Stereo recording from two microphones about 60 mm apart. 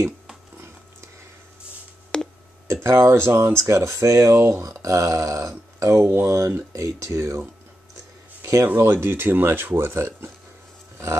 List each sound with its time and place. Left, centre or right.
2.1 s busy signal: centre
2.7 s speech: right
8.7 s speech: right